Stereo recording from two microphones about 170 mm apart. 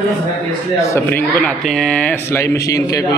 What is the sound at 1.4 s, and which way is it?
A man's voice, centre (ahead or behind).